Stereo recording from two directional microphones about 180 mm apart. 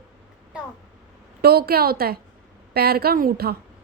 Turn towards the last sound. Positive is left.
turn(degrees=-60)  # may be behind; listen again after turning